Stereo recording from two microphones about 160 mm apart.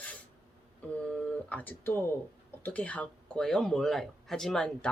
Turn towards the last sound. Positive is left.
turn(degrees=5)  # may be behind; listen again after turning